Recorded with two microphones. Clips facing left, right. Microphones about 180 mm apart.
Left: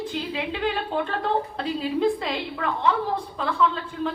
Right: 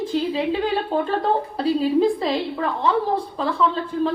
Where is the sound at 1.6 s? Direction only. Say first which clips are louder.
Right 6 dB; 35° right (ahead or behind).